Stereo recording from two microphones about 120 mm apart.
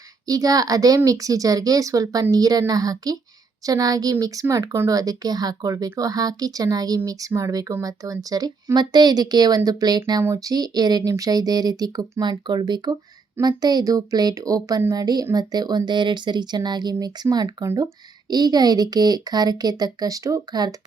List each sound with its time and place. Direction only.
0.3 s speech: 30° right (ahead or behind)